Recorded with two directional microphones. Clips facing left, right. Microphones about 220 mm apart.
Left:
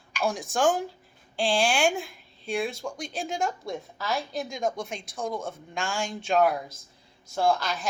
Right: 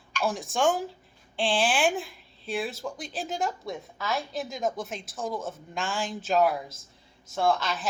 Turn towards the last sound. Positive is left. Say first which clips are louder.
# left 1 dB
turn(degrees=0)  # may be behind; listen again after turning